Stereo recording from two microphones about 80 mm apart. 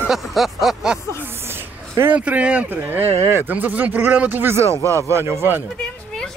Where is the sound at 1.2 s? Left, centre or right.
Right.